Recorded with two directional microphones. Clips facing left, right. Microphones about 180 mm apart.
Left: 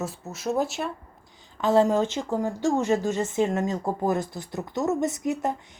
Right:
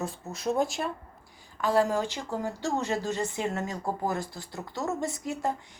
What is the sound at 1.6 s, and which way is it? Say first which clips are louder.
Speech: left 5 dB; 20° left (ahead or behind).